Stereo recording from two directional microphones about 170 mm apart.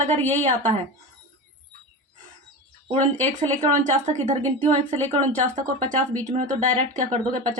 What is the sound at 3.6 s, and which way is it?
A woman's voice, 45° right (ahead or behind).